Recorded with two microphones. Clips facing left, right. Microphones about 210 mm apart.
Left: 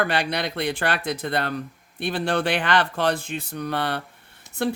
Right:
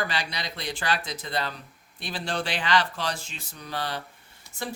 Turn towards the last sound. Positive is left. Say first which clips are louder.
# left 10 dB
turn(degrees=60)  # may be behind; listen again after turning